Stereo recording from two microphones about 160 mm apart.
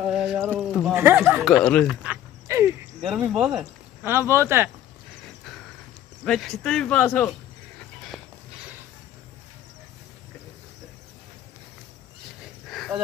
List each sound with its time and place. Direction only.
0.0 s a sound: centre (ahead or behind)
0.5 s speech: 5° right (ahead or behind)
0.9 s speech: 15° right (ahead or behind)
1.5 s speech: 5° left (ahead or behind)
2.0 s cricket: 15° right (ahead or behind)
3.0 s speech: centre (ahead or behind)
4.3 s speech: 15° right (ahead or behind)
6.2 s speech: 5° left (ahead or behind)
8.1 s a sound: 5° right (ahead or behind)
12.6 s a sound: centre (ahead or behind)